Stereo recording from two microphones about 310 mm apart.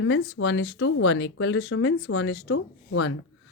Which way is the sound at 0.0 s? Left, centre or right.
Left.